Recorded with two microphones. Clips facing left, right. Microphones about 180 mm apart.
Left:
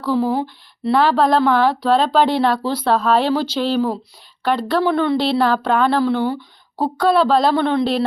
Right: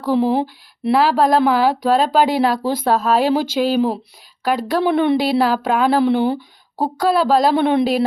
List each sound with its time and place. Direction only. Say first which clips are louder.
0.0 s speech: right 2 dB; 15° right (ahead or behind)
4.4 s speech: even; 5° right (ahead or behind)
4.8 s speech: right 4 dB; 20° right (ahead or behind)
6.0 s speech: right 2 dB; 20° right (ahead or behind)